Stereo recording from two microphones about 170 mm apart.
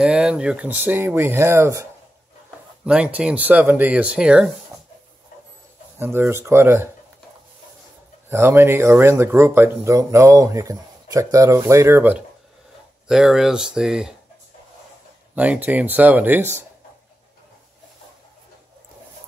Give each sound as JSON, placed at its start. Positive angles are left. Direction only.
{"t": 0.0, "sound": "speech", "side_deg": -5}
{"t": 5.9, "sound": "speech", "side_deg": -15}
{"t": 8.3, "sound": "speech", "side_deg": -15}
{"t": 15.3, "sound": "speech", "side_deg": -10}